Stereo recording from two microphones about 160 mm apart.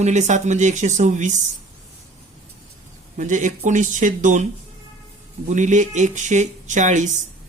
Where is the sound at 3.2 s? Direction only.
50° right (ahead or behind).